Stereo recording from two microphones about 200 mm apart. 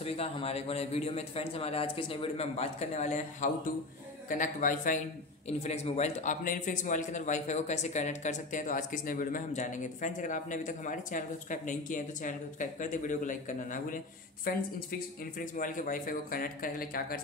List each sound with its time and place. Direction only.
0.0 s a man's voice: 30° left (ahead or behind); by 17.2 s 45° left (ahead or behind)